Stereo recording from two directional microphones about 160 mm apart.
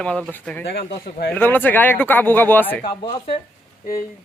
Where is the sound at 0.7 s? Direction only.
90° left.